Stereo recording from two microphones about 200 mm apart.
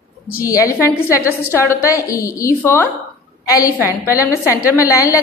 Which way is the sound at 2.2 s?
15° left (ahead or behind).